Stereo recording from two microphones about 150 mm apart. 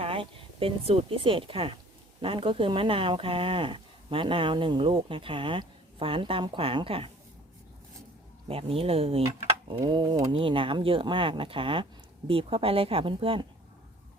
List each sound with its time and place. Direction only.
0.0 s speech: 40° right (ahead or behind)
8.4 s speech: 40° right (ahead or behind)